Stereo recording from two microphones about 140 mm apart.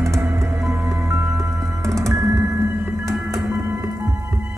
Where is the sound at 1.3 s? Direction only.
20° right (ahead or behind).